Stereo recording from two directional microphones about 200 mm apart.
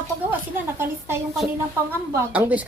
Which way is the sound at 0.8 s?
10° right (ahead or behind).